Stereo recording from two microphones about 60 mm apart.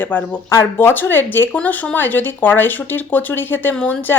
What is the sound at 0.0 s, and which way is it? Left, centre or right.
Speech, left.